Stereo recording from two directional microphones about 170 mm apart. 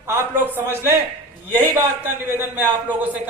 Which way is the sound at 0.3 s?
15° right (ahead or behind).